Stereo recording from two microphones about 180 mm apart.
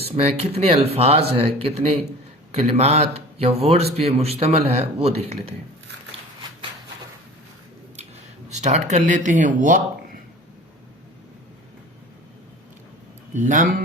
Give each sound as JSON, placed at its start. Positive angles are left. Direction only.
{"t": 0.0, "sound": "speech", "side_deg": -35}
{"t": 8.4, "sound": "speech", "side_deg": -40}
{"t": 13.3, "sound": "speech", "side_deg": -45}